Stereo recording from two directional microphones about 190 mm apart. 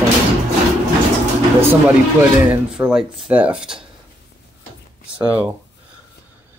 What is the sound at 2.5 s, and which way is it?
Speech, 5° right (ahead or behind).